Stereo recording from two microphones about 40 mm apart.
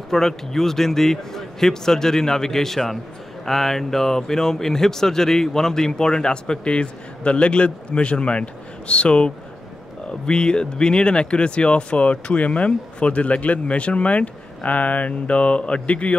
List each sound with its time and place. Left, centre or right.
0.1 s speech: centre; by 16.2 s left